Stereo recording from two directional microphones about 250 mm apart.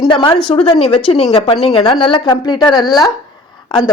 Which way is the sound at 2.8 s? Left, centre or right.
Centre.